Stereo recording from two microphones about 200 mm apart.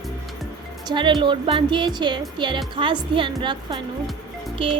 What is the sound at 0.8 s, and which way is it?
Speech, 20° right (ahead or behind).